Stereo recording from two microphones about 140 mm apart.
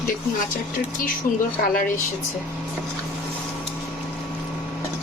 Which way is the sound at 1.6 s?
75° left (ahead or behind).